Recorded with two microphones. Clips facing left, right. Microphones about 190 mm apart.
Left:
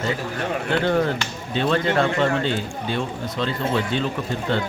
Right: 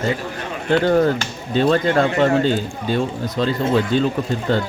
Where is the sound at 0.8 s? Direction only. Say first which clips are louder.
Right 5 dB; 40° right (ahead or behind).